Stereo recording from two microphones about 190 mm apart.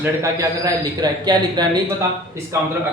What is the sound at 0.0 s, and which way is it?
A man's voice, 15° right (ahead or behind).